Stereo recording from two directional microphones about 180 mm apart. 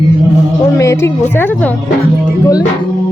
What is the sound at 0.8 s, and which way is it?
Speech, 15° left (ahead or behind).